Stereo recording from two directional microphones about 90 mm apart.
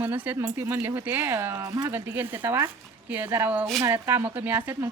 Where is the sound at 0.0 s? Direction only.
20° right (ahead or behind); by 2.0 s 35° right (ahead or behind).